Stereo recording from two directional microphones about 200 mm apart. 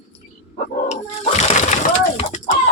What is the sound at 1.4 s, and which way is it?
Splash, 35° left (ahead or behind).